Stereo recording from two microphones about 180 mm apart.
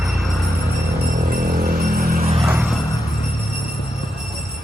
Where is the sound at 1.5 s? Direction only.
60° right (ahead or behind).